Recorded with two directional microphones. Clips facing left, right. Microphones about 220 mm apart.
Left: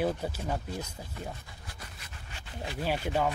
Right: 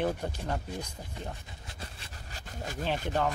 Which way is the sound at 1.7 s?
30° right (ahead or behind).